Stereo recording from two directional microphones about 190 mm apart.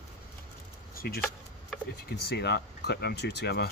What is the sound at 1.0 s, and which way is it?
Speech, 50° left (ahead or behind).